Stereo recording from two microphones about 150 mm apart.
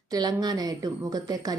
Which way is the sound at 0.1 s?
25° right (ahead or behind).